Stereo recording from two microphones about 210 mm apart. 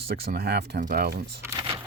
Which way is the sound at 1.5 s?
15° right (ahead or behind).